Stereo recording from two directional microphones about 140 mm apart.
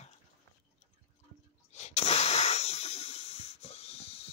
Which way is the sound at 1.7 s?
50° left (ahead or behind).